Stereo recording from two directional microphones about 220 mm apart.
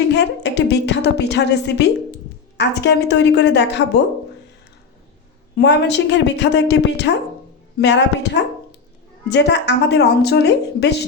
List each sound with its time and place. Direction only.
0.1 s a woman's voice: 50° left (ahead or behind)
5.5 s a woman's voice: 50° left (ahead or behind)